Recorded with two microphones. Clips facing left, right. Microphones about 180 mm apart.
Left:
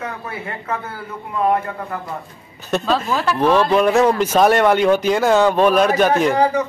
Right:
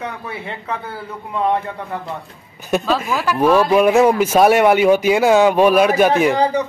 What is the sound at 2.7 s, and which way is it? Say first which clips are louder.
Speech: right 1 dB; 10° right (ahead or behind).